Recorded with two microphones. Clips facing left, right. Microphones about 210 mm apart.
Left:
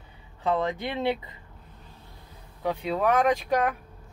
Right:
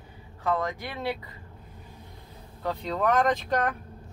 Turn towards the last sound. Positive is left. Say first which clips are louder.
# left 2 dB
turn(degrees=10)  # may be behind; listen again after turning